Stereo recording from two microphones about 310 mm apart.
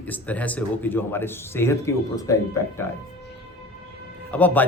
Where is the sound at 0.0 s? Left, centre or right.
Centre.